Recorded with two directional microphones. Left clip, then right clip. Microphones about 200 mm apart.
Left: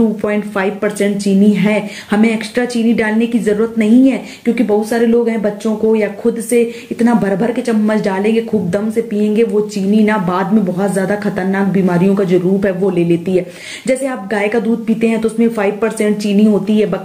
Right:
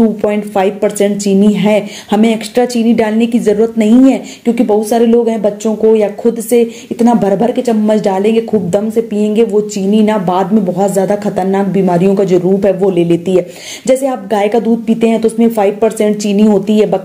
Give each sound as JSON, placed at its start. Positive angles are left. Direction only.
{"t": 0.3, "sound": "speech", "side_deg": -20}